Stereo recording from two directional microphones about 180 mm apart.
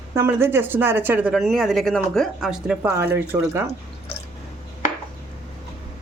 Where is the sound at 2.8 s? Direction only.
15° right (ahead or behind).